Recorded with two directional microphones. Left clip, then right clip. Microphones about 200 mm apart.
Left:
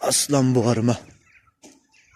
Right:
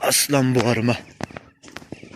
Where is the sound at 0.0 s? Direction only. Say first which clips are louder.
Right 2 dB; 15° left (ahead or behind).